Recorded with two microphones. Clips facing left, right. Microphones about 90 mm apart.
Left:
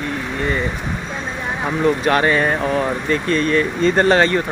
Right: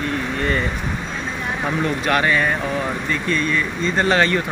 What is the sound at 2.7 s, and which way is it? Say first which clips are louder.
Speech: left 4 dB; 40° left (ahead or behind).